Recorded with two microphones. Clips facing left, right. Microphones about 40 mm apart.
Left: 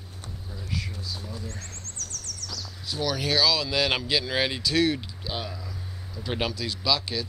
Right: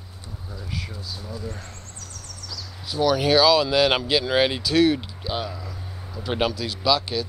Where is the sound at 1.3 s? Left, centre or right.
Right.